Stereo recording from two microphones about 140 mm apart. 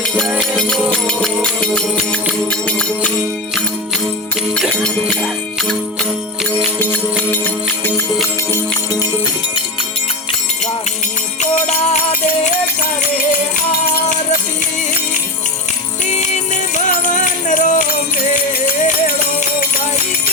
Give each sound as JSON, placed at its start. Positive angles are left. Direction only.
{"t": 0.2, "sound": "music", "side_deg": -5}
{"t": 1.0, "sound": "music", "side_deg": 5}
{"t": 4.5, "sound": "music", "side_deg": 5}
{"t": 5.0, "sound": "jingle bell", "side_deg": 5}
{"t": 7.3, "sound": "music", "side_deg": 15}
{"t": 16.7, "sound": "music", "side_deg": 65}